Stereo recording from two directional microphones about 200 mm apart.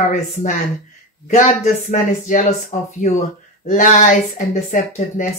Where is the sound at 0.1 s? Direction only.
35° left (ahead or behind).